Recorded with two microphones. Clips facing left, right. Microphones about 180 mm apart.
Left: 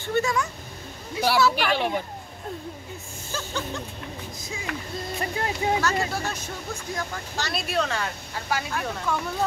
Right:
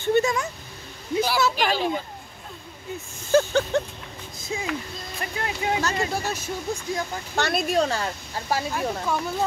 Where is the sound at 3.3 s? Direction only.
60° right (ahead or behind).